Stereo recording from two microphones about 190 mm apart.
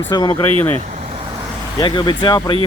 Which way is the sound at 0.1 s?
25° left (ahead or behind).